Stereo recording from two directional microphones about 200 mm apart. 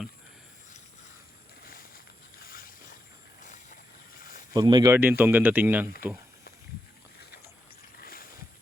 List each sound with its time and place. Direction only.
1.6 s a sound: 45° left (ahead or behind)
2.4 s boat: 45° left (ahead or behind)
3.4 s vehicle: 40° left (ahead or behind)
4.2 s a sound: 45° left (ahead or behind)
4.5 s speech: 20° right (ahead or behind)
8.0 s vehicle: 45° left (ahead or behind)